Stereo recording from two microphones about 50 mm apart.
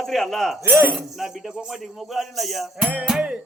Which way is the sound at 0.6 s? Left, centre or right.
Right.